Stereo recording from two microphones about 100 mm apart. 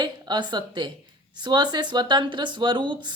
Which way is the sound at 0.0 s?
45° right (ahead or behind).